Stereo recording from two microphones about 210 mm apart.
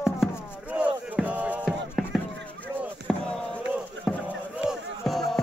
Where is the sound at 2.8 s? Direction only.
5° left (ahead or behind).